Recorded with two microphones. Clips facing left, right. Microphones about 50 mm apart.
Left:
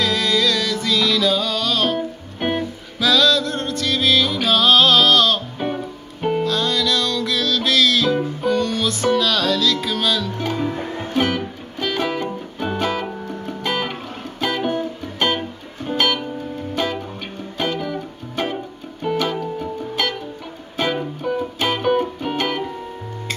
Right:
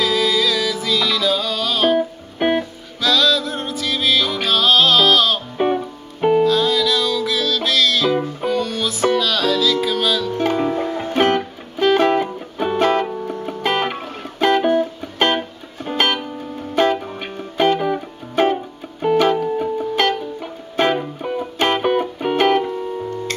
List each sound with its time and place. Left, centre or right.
0.0 s music: centre
3.0 s music: centre
5.6 s music: right
6.2 s music: centre
16.7 s music: centre
17.7 s music: right